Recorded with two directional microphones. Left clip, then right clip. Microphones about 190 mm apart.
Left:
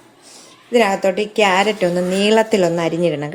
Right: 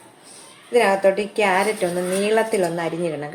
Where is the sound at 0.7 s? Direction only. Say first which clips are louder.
Left 1 dB; 45° left (ahead or behind).